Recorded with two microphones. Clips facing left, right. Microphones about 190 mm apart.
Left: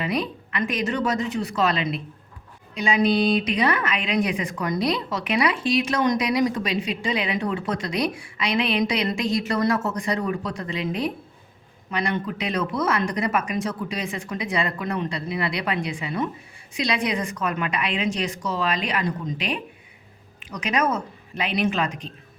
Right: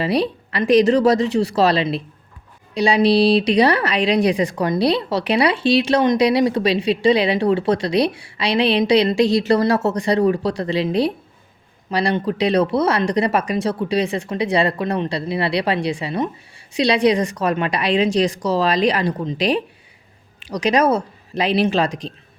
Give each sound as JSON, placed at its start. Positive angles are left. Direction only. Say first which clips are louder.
{"t": 0.0, "sound": "a woman's voice", "louder": "right 7 dB", "side_deg": -35}
{"t": 1.1, "sound": "speech", "louder": "right 8 dB", "side_deg": -80}
{"t": 1.5, "sound": "a woman's voice", "louder": "right 4 dB", "side_deg": -35}